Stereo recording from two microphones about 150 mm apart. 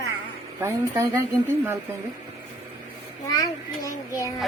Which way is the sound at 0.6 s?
20° right (ahead or behind).